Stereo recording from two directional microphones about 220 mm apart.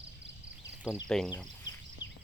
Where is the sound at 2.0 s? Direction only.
55° left (ahead or behind).